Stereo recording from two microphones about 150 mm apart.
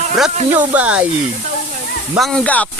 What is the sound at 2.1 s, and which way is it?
Speech, 5° left (ahead or behind).